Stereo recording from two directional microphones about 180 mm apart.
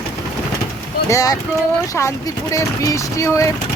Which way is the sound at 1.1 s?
20° left (ahead or behind).